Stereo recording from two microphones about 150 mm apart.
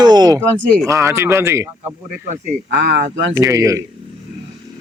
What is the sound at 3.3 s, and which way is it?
Speech, 20° right (ahead or behind).